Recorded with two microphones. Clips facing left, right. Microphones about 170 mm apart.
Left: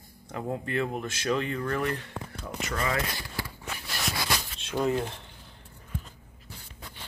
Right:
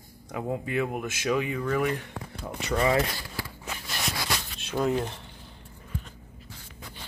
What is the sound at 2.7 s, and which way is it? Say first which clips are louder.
Speech: right 7 dB; 30° right (ahead or behind).